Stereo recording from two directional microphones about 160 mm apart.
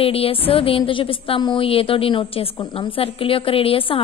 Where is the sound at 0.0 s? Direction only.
35° left (ahead or behind).